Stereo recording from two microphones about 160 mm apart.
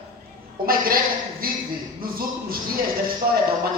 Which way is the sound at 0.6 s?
65° right (ahead or behind).